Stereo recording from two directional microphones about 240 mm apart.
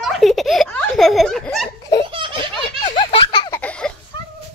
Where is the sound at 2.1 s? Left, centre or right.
Right.